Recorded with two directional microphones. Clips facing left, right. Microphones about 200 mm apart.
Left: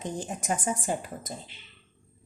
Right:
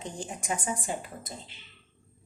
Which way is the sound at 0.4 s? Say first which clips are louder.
Left 3 dB; 40° left (ahead or behind).